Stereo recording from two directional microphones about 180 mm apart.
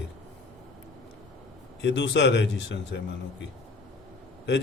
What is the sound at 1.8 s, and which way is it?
Speech, 75° left (ahead or behind).